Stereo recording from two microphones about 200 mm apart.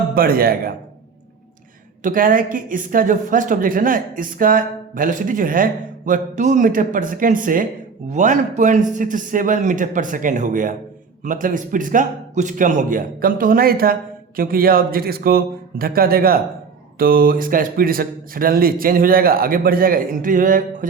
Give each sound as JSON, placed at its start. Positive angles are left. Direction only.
{"t": 0.1, "sound": "speech", "side_deg": -45}
{"t": 2.0, "sound": "a man's voice", "side_deg": -45}